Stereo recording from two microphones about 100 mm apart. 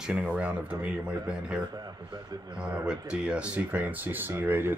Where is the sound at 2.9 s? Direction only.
10° right (ahead or behind).